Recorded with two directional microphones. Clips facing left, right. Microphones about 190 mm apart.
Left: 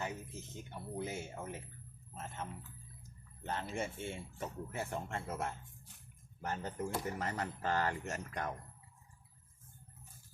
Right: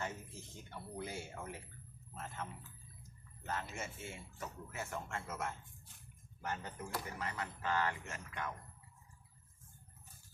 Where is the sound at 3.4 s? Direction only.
30° left (ahead or behind).